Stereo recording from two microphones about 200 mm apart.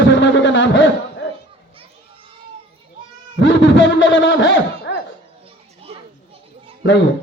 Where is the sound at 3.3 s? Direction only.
65° left (ahead or behind).